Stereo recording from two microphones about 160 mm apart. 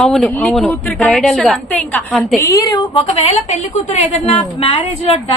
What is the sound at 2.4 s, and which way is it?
Speech, 20° left (ahead or behind).